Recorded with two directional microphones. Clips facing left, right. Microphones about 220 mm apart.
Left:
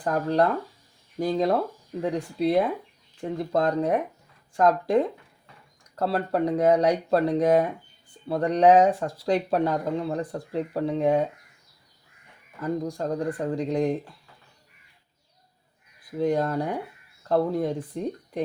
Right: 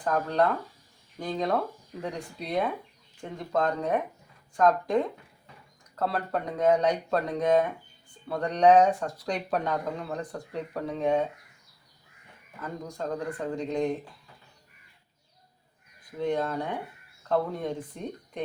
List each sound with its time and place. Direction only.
0.0 s speech: 35° left (ahead or behind)
6.0 s speech: 30° left (ahead or behind)
12.6 s speech: 35° left (ahead or behind)
16.1 s speech: 40° left (ahead or behind)